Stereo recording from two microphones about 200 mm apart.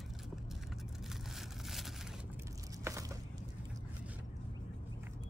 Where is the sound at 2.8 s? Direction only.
15° right (ahead or behind).